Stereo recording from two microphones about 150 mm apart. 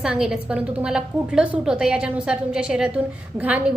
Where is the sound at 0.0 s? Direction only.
5° right (ahead or behind).